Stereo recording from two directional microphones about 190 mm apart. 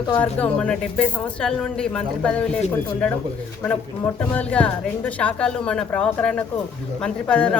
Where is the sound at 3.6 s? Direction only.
10° left (ahead or behind).